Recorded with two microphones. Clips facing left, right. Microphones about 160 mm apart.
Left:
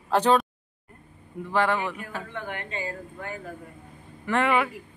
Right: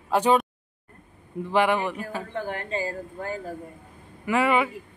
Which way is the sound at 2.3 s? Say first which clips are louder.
Right 7 dB; 35° right (ahead or behind).